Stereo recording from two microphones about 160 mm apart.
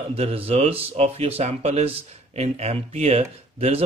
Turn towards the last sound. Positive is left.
turn(degrees=-40)  # may be behind; listen again after turning